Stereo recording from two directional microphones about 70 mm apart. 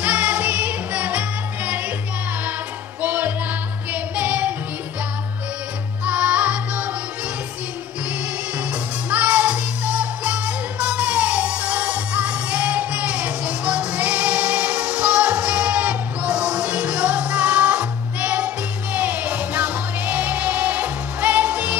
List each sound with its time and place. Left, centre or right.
0.0 s music: centre
3.0 s music: right
6.0 s music: centre
9.1 s music: centre